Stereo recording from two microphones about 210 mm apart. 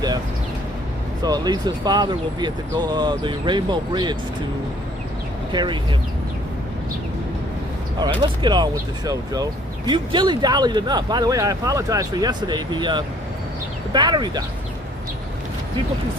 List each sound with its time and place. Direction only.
1.2 s speech: 20° right (ahead or behind)
5.5 s speech: 20° right (ahead or behind)
7.9 s speech: 20° right (ahead or behind)